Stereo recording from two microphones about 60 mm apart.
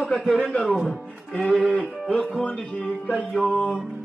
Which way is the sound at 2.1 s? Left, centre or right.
Centre.